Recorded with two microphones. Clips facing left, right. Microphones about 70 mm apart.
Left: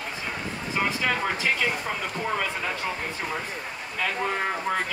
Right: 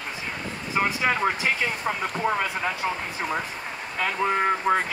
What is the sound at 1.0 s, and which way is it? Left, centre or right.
Speech, centre.